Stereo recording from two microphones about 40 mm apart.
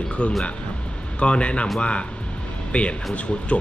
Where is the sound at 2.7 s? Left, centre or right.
Left.